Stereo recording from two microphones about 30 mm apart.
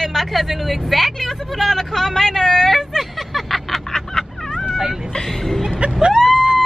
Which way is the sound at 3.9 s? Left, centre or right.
Centre.